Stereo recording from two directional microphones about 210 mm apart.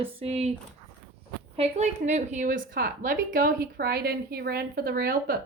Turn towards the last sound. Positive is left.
turn(degrees=-45)  # may be behind; listen again after turning